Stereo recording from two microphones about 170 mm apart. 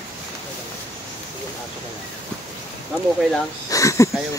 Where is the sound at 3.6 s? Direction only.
20° left (ahead or behind).